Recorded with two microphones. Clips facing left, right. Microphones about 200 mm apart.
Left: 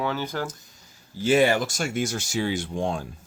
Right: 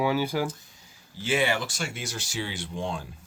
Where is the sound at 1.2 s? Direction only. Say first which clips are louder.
Left 6 dB; 40° left (ahead or behind).